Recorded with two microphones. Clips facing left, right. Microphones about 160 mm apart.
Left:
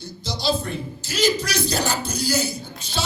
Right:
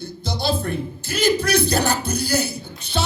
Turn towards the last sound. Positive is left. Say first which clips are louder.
# right 3 dB
turn(degrees=-60)  # may be behind; listen again after turning